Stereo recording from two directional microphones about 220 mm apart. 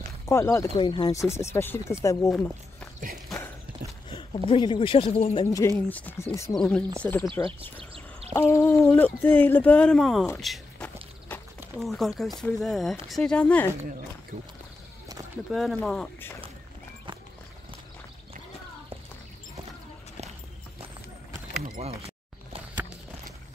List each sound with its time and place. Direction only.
0.3 s speech: 10° left (ahead or behind)
4.5 s speech: 20° left (ahead or behind)
5.8 s speech: 10° left (ahead or behind)
7.4 s a sound: 25° right (ahead or behind)
8.4 s speech: 10° left (ahead or behind)
10.4 s a sound: 5° left (ahead or behind)
12.4 s speech: centre (ahead or behind)
14.3 s speech: 35° right (ahead or behind)
15.5 s speech: 5° left (ahead or behind)
21.8 s a sound: 30° right (ahead or behind)